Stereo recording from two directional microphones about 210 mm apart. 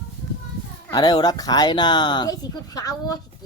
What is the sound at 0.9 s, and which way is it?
Speech, 20° left (ahead or behind).